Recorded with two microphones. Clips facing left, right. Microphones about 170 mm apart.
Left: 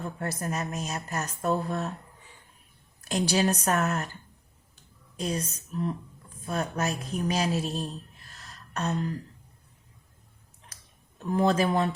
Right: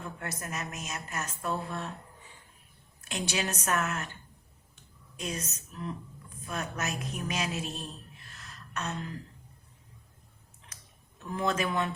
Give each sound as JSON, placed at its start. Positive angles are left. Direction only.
{"t": 0.0, "sound": "speech", "side_deg": 35}
{"t": 3.0, "sound": "speech", "side_deg": 35}
{"t": 4.7, "sound": "a sound", "side_deg": 35}
{"t": 6.4, "sound": "speech", "side_deg": 35}
{"t": 8.3, "sound": "a sound", "side_deg": 35}
{"t": 10.7, "sound": "tick-tock", "side_deg": 35}
{"t": 11.3, "sound": "speech", "side_deg": 35}